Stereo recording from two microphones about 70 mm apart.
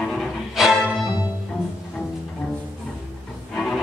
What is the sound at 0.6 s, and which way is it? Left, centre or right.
Music, centre.